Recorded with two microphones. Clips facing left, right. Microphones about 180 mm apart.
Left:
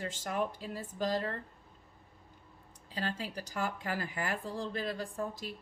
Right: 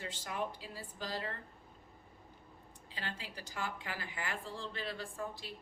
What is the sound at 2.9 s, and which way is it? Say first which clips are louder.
A woman's voice: left 8 dB; 45° left (ahead or behind).